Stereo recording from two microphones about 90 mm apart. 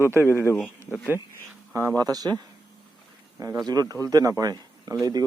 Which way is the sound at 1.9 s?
45° right (ahead or behind).